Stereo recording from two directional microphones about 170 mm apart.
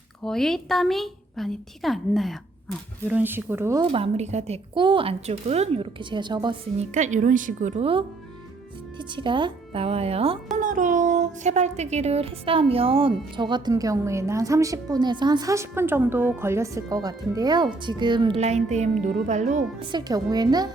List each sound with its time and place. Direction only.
0.3 s a woman's voice: centre (ahead or behind)
3.1 s speech: 10° right (ahead or behind)
3.9 s a woman's voice: 40° right (ahead or behind)
6.7 s a woman's voice: 45° right (ahead or behind)
9.0 s a woman's voice: 30° right (ahead or behind)
10.6 s speech: 50° right (ahead or behind); by 18.3 s 25° right (ahead or behind)
18.3 s a woman's voice: 40° right (ahead or behind)
19.8 s speech: 25° right (ahead or behind)